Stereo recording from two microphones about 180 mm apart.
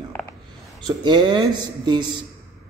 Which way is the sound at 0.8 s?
25° right (ahead or behind).